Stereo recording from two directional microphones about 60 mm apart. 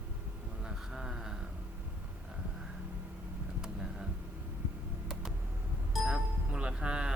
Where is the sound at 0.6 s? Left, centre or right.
Centre.